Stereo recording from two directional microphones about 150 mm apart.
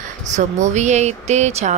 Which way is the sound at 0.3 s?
55° right (ahead or behind).